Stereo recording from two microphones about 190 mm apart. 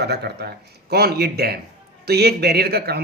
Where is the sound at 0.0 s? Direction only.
60° right (ahead or behind).